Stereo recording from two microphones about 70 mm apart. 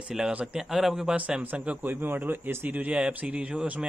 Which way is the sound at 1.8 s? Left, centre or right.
Right.